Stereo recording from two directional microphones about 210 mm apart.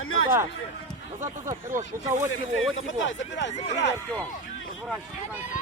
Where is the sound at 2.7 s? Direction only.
65° left (ahead or behind).